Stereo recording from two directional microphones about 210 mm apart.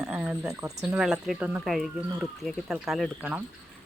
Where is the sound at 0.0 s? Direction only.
5° right (ahead or behind).